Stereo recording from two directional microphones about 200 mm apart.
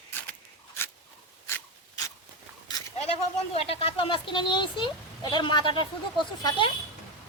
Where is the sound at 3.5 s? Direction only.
30° left (ahead or behind).